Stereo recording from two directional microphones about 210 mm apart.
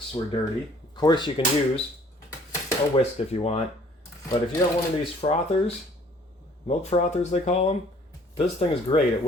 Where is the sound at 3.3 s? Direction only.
30° left (ahead or behind).